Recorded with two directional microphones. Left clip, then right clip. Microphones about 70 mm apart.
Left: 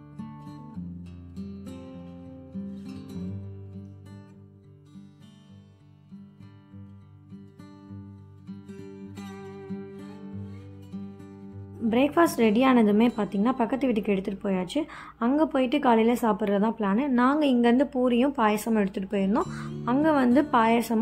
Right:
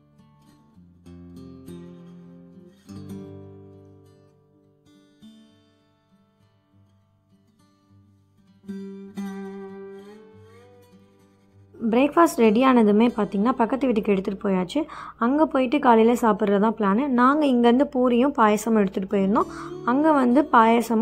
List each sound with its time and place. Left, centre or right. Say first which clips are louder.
0.2 s music: left 14 dB; left
8.6 s music: right 6 dB; left
11.9 s a woman's voice: right 4 dB; right
19.3 s a woman's voice: right 5 dB; right